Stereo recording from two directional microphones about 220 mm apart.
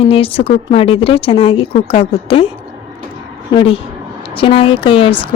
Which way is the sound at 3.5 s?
25° left (ahead or behind).